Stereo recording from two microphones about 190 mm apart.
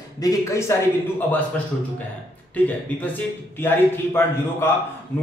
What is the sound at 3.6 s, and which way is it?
A man's voice, 10° left (ahead or behind).